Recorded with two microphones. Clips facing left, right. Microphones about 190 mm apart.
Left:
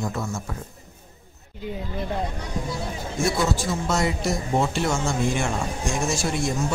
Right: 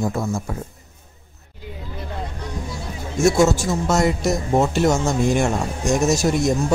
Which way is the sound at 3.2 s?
45° right (ahead or behind).